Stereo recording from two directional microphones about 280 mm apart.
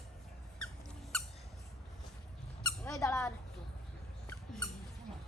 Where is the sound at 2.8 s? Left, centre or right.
Centre.